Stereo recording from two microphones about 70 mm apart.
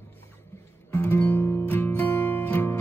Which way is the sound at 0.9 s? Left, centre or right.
Left.